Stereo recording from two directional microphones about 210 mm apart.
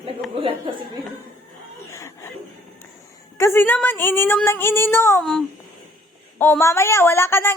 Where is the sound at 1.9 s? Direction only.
15° left (ahead or behind).